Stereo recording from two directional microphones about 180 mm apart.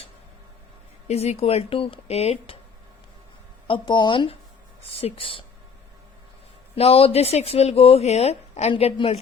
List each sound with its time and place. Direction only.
1.0 s speech: 35° left (ahead or behind)
3.7 s speech: 25° left (ahead or behind)
6.7 s speech: 35° left (ahead or behind)